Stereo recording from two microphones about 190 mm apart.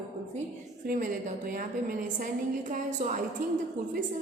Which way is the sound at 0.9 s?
45° right (ahead or behind).